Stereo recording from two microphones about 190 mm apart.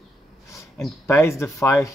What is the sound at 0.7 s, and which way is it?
Speech, 15° left (ahead or behind).